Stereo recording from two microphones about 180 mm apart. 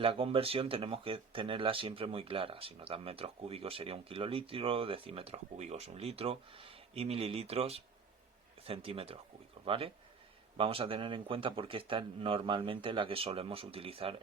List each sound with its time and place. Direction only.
0.0 s speech: 30° right (ahead or behind)